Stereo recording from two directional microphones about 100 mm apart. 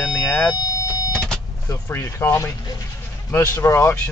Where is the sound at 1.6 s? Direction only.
25° left (ahead or behind).